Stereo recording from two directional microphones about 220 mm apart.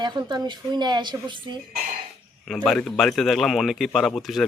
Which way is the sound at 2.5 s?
Centre (ahead or behind).